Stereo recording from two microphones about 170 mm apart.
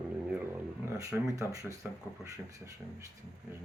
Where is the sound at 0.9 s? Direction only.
20° right (ahead or behind).